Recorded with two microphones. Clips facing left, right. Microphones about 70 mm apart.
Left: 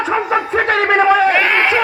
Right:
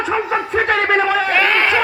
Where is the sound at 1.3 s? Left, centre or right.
Centre.